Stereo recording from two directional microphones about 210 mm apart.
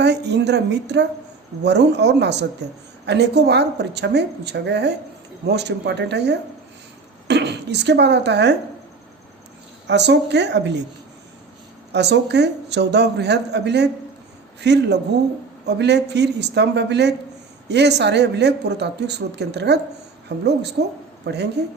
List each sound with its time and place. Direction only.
0.0 s speech: 55° right (ahead or behind)
9.8 s a woman's voice: 55° right (ahead or behind)
11.9 s speech: 55° right (ahead or behind)